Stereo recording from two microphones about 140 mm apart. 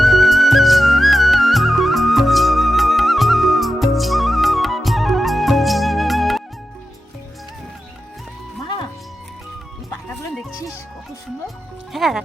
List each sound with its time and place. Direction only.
0.0 s music: centre (ahead or behind)
8.6 s music: 35° left (ahead or behind)
11.4 s music: centre (ahead or behind)